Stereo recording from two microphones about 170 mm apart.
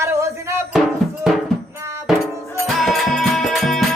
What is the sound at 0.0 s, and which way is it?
Music, 15° right (ahead or behind).